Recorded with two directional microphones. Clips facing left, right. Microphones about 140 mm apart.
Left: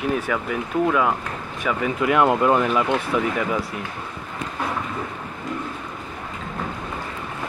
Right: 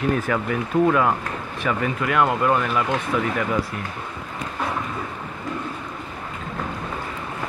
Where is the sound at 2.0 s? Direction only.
20° left (ahead or behind).